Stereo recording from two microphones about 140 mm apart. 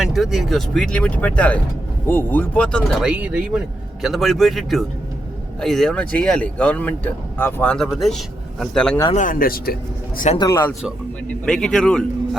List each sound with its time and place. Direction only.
0.0 s speech: centre (ahead or behind)
3.0 s speech: 10° right (ahead or behind)
9.1 s speech: 75° left (ahead or behind)
10.5 s speech: 15° left (ahead or behind)
11.4 s speech: 5° left (ahead or behind)